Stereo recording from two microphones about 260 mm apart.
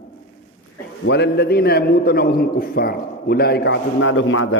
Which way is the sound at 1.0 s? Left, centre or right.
Left.